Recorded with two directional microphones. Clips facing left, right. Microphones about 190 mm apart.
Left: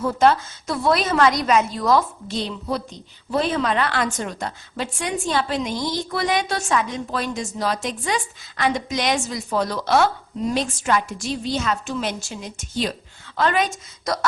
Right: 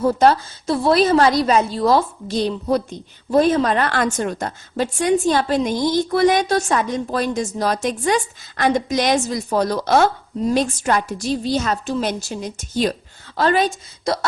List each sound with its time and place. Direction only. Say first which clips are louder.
0.0 s a woman's voice: right 3 dB; 40° right (ahead or behind)